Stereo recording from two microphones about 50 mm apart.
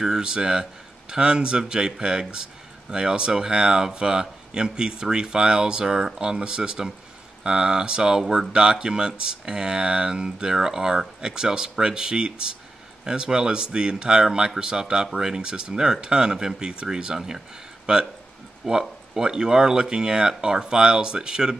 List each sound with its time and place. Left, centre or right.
0.0 s speech: centre